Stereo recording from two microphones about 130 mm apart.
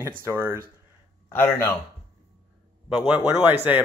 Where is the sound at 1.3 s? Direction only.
15° left (ahead or behind).